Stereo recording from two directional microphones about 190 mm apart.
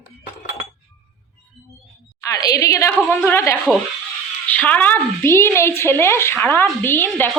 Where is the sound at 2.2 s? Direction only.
20° left (ahead or behind).